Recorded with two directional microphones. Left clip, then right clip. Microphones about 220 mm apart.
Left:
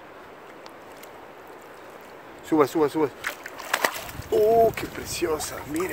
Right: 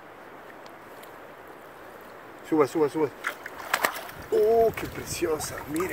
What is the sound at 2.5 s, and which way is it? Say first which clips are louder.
Speech: left 2 dB; 15° left (ahead or behind).